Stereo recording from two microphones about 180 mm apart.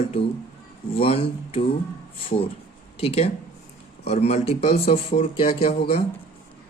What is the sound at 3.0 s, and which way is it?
Speech, 35° left (ahead or behind).